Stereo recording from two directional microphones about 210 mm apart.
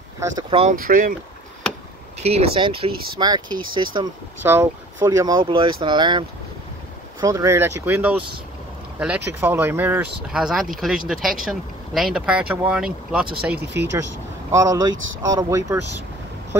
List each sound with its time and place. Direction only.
0.2 s speech: 25° right (ahead or behind)
0.8 s speech: 40° right (ahead or behind)
2.1 s speech: 30° right (ahead or behind)
4.4 s speech: 10° right (ahead or behind)
14.5 s speech: 15° right (ahead or behind)